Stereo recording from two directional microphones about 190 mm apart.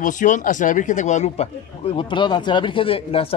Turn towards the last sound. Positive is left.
turn(degrees=25)  # may be behind; listen again after turning